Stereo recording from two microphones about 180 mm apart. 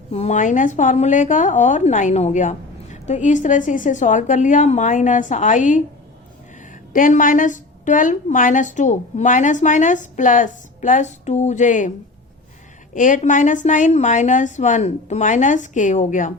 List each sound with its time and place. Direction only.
0.1 s a woman's voice: 35° left (ahead or behind)
6.9 s a woman's voice: 45° left (ahead or behind)
12.9 s a woman's voice: 45° left (ahead or behind)